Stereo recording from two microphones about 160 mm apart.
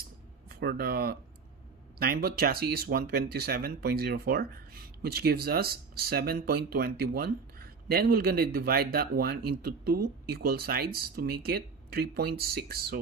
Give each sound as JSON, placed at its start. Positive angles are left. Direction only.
{"t": 0.5, "sound": "speech", "side_deg": -80}